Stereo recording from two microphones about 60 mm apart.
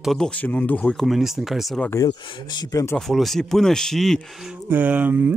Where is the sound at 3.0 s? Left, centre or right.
Centre.